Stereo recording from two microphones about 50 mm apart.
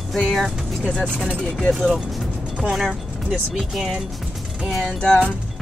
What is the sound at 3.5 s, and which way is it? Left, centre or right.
Speech, centre.